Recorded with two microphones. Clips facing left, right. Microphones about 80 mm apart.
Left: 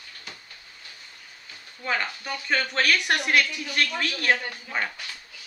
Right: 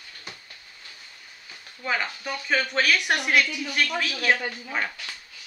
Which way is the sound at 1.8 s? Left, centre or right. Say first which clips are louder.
Even; centre.